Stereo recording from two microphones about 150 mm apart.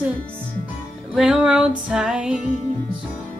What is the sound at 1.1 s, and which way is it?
Music, 5° right (ahead or behind).